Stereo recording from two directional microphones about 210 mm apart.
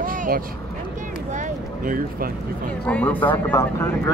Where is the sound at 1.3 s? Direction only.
40° right (ahead or behind).